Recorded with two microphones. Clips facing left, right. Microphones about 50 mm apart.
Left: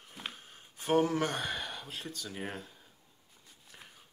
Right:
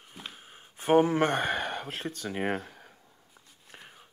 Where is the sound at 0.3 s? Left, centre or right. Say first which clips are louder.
Right 1 dB; centre; by 3.0 s right.